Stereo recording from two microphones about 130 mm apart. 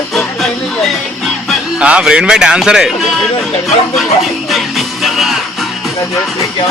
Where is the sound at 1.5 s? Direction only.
10° right (ahead or behind).